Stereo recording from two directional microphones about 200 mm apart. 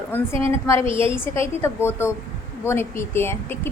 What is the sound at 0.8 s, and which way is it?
Speech, 25° right (ahead or behind).